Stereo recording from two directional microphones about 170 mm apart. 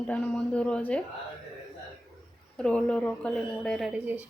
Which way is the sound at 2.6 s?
5° left (ahead or behind).